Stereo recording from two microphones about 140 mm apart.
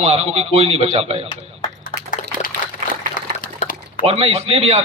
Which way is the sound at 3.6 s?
50° left (ahead or behind).